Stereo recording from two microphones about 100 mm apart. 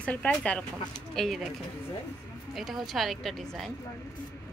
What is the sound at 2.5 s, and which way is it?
A woman's voice, centre (ahead or behind).